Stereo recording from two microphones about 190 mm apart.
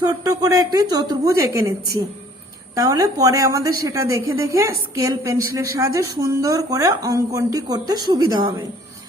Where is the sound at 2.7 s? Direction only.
20° right (ahead or behind).